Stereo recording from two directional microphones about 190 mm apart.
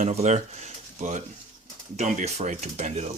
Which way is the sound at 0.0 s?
35° right (ahead or behind).